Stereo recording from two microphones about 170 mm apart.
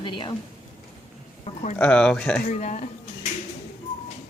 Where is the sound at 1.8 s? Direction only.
5° left (ahead or behind).